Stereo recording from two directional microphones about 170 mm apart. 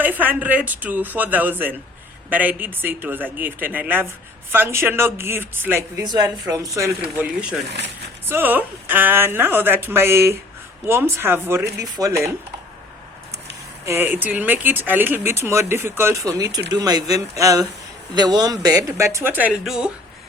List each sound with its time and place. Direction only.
0.0 s speech: 10° right (ahead or behind)
6.1 s speech: 25° right (ahead or behind)
8.3 s speech: 10° right (ahead or behind)
13.8 s speech: 15° right (ahead or behind)